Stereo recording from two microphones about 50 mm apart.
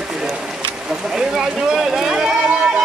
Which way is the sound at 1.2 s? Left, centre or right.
Centre.